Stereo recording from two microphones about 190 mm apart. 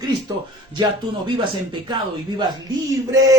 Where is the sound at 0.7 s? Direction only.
25° right (ahead or behind).